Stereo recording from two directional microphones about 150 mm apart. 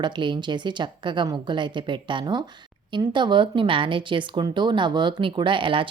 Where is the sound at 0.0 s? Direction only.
30° right (ahead or behind).